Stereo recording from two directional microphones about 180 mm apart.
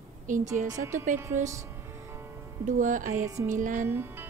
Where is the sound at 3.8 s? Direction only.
10° right (ahead or behind).